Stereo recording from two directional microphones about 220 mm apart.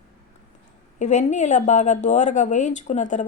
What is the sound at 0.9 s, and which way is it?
Speech, 35° left (ahead or behind).